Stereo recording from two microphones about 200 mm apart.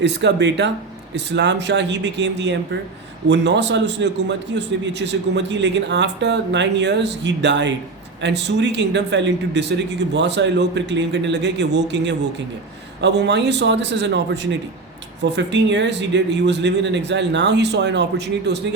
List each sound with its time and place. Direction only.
0.0 s a man's voice: 60° right (ahead or behind)